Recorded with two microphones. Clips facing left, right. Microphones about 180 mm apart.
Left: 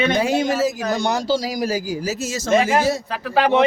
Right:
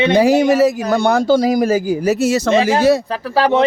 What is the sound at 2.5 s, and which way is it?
Speech, 30° right (ahead or behind).